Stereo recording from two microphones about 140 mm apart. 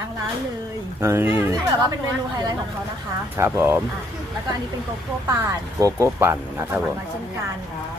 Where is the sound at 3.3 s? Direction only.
20° right (ahead or behind).